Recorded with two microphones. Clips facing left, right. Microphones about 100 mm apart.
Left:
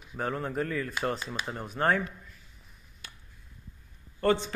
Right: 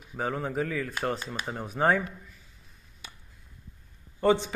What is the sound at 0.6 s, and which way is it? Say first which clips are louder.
Speech: right 1 dB; 90° right.